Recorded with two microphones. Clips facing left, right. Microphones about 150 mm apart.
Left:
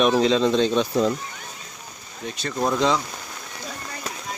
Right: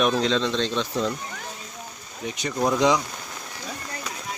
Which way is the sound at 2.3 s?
15° right (ahead or behind).